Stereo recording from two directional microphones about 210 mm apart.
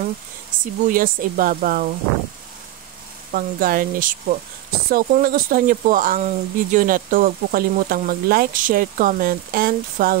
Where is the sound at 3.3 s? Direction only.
40° right (ahead or behind).